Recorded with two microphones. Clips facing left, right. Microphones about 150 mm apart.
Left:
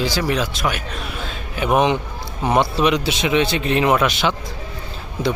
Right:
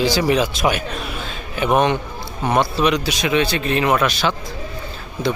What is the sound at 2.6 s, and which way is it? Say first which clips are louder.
Speech: even; 20° left (ahead or behind).